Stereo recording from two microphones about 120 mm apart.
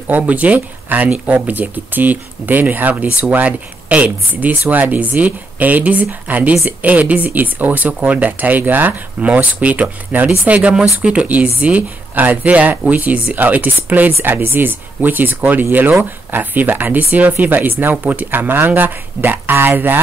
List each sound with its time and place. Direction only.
0.1 s speech: 10° right (ahead or behind)